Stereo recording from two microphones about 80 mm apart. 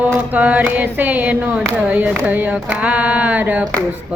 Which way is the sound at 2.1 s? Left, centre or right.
Centre.